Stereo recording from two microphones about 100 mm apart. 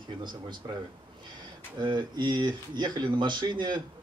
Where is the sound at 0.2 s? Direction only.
50° right (ahead or behind).